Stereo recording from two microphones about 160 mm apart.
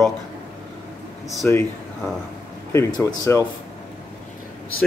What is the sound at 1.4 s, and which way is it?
Speech, 10° left (ahead or behind).